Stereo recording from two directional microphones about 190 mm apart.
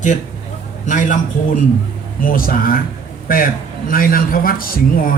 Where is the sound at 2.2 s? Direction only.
50° left (ahead or behind).